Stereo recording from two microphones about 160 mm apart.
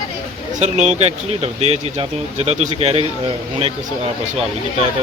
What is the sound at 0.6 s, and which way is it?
Speech, 45° right (ahead or behind).